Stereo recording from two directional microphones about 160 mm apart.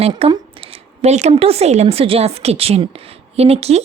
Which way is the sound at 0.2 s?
30° right (ahead or behind).